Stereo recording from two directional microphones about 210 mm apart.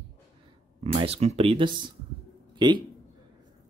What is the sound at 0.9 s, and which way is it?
Speech, 30° right (ahead or behind).